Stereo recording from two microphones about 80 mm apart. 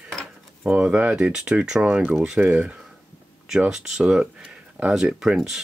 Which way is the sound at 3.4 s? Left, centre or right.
Centre.